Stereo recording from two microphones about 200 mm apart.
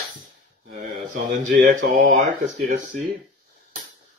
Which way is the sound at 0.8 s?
40° right (ahead or behind).